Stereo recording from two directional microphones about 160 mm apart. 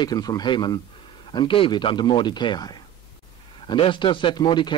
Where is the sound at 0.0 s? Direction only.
25° left (ahead or behind).